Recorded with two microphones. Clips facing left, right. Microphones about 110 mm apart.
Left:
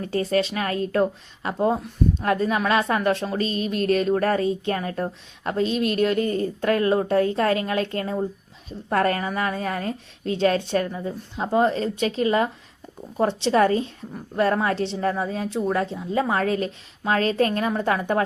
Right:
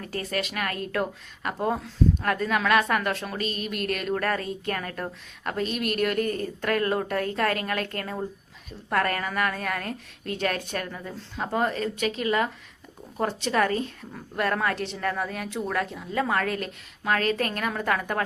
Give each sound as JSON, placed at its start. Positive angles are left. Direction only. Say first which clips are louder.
{"t": 0.0, "sound": "speech", "louder": "left 8 dB", "side_deg": 30}
{"t": 1.5, "sound": "speech", "louder": "left 4 dB", "side_deg": 15}